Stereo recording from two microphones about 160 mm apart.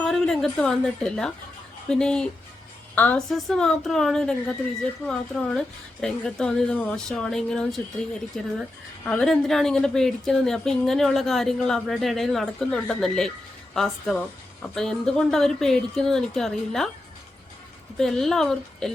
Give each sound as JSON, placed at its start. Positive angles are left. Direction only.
{"t": 0.0, "sound": "a woman's voice", "side_deg": 0}
{"t": 17.9, "sound": "a woman's voice", "side_deg": 5}